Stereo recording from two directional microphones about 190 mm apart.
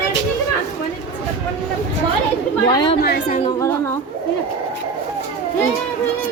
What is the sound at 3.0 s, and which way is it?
Speech, 55° left (ahead or behind).